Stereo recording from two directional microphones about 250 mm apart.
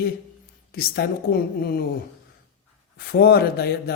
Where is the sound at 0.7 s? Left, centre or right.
Left.